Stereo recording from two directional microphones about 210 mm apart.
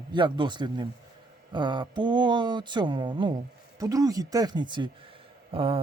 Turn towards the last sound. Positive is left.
turn(degrees=-25)  # may be behind; listen again after turning